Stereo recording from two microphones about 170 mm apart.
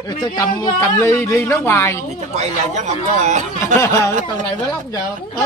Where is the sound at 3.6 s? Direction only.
15° left (ahead or behind).